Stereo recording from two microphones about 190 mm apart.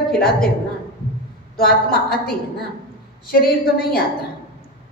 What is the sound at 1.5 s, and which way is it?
Speech, 50° left (ahead or behind).